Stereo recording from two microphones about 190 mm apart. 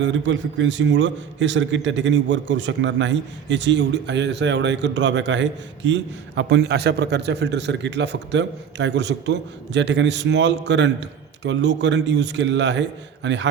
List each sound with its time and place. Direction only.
0.0 s a man's voice: 70° right (ahead or behind)